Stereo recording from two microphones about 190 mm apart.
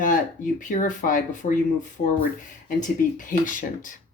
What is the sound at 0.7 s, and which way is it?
Speech, 45° left (ahead or behind).